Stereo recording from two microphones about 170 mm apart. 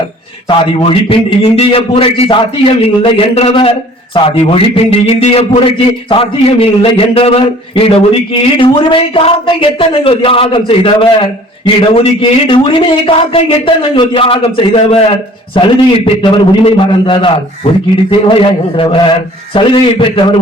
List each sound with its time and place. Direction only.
0.4 s a man's voice: 35° left (ahead or behind)